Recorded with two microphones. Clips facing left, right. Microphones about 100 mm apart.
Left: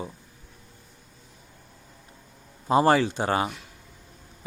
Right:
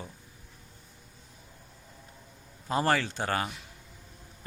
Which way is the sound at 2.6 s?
20° left (ahead or behind).